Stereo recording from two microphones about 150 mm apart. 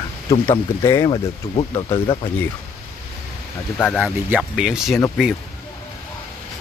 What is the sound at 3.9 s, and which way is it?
Speech, 5° right (ahead or behind).